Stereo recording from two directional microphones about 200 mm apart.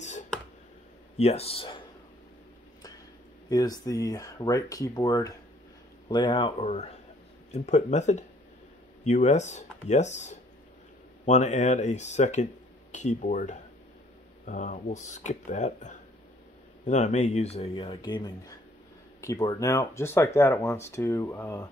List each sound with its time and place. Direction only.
1.1 s speech: 30° left (ahead or behind)
3.4 s speech: 20° left (ahead or behind)